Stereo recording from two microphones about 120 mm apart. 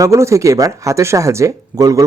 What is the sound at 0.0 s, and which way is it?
A man's voice, 25° right (ahead or behind).